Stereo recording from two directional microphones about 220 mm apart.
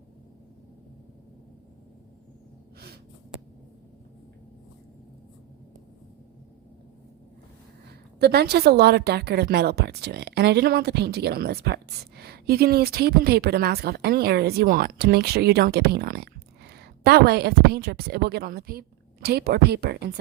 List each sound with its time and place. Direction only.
7.9 s a woman's voice: 50° right (ahead or behind)